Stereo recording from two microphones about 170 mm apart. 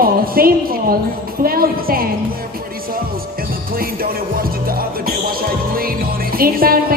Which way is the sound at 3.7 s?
60° right (ahead or behind).